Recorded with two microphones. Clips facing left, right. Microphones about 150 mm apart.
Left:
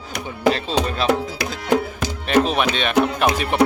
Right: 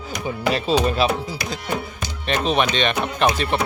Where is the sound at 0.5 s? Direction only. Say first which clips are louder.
Right 3 dB; 10° right (ahead or behind).